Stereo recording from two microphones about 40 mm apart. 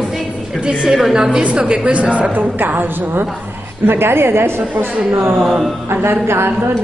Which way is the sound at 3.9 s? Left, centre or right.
Right.